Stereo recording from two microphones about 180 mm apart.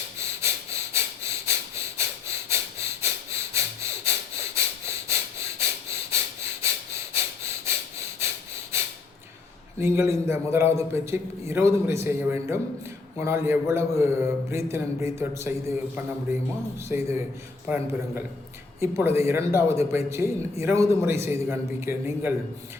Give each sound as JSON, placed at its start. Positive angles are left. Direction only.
{"t": 0.2, "sound": "breathing", "side_deg": -15}
{"t": 9.7, "sound": "a man's voice", "side_deg": -15}